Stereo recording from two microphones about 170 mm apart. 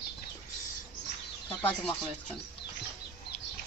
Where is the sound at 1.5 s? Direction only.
10° left (ahead or behind).